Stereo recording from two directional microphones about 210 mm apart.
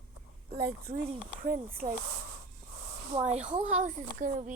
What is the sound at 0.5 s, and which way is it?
Speech, 45° right (ahead or behind).